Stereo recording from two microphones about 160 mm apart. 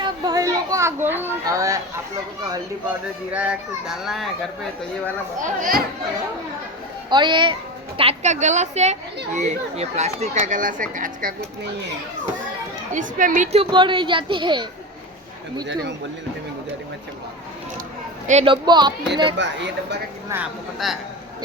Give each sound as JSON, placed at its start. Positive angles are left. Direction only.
{"t": 0.0, "sound": "children playing", "side_deg": -25}
{"t": 1.0, "sound": "a child's voice", "side_deg": -15}
{"t": 3.3, "sound": "a child's voice", "side_deg": -5}
{"t": 5.5, "sound": "speech", "side_deg": -60}
{"t": 7.1, "sound": "a child's voice", "side_deg": -30}
{"t": 7.9, "sound": "speech", "side_deg": -40}
{"t": 12.9, "sound": "speech", "side_deg": -55}
{"t": 13.7, "sound": "a child's voice", "side_deg": -30}
{"t": 15.6, "sound": "speech", "side_deg": -90}
{"t": 18.4, "sound": "a child's voice", "side_deg": -30}
{"t": 19.4, "sound": "speech", "side_deg": -90}
{"t": 20.3, "sound": "a child's voice", "side_deg": -5}